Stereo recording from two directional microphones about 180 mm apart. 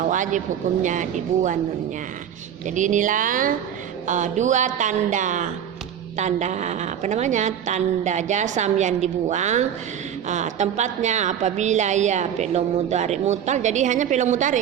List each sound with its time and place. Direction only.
0.0 s speech: 45° right (ahead or behind)
2.6 s a woman's voice: 45° right (ahead or behind)